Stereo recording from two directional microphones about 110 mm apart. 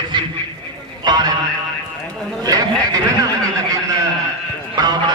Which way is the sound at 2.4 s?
35° right (ahead or behind).